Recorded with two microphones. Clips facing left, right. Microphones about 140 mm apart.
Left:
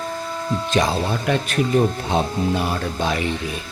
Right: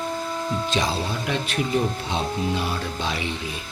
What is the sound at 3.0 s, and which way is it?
Speech, 50° left (ahead or behind).